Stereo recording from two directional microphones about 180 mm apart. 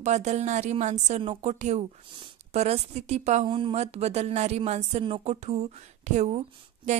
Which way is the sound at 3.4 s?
30° right (ahead or behind).